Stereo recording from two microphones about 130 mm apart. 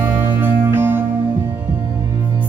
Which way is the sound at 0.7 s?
15° right (ahead or behind).